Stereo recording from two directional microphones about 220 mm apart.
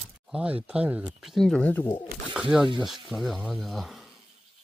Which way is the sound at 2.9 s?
Centre (ahead or behind).